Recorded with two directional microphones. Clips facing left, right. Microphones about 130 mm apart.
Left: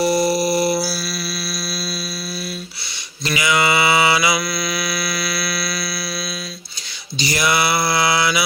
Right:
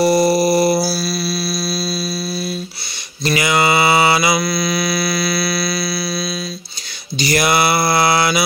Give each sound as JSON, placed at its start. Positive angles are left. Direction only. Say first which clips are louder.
{"t": 0.0, "sound": "mantra", "louder": "right 4 dB", "side_deg": -45}
{"t": 3.3, "sound": "mantra", "louder": "right 3 dB", "side_deg": -45}
{"t": 7.2, "sound": "mantra", "louder": "right 4 dB", "side_deg": -50}